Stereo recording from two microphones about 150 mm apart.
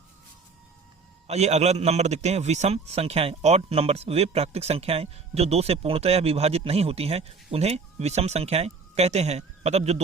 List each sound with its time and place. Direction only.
1.3 s a man's voice: 50° right (ahead or behind)